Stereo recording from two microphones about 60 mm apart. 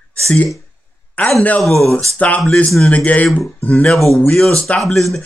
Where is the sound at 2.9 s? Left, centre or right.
Left.